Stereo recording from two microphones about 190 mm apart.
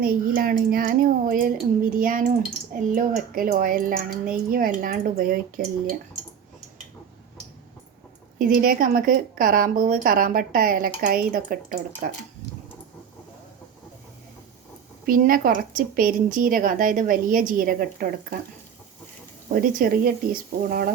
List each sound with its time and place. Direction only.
0.0 s a woman's voice: 50° right (ahead or behind)
8.4 s a woman's voice: 50° right (ahead or behind)
15.0 s a woman's voice: 50° right (ahead or behind)
19.5 s a woman's voice: 50° right (ahead or behind)